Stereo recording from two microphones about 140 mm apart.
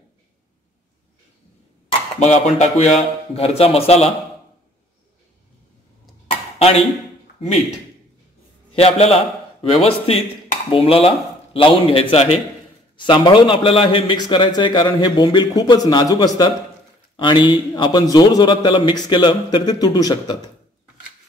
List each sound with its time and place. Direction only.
2.1 s speech: 55° left (ahead or behind)
8.7 s a man's voice: 45° left (ahead or behind); by 20.5 s 30° left (ahead or behind)